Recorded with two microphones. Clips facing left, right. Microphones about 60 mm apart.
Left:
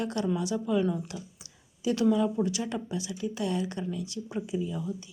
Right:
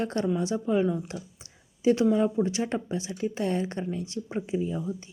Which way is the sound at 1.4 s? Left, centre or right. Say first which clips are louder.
Right 8 dB; right.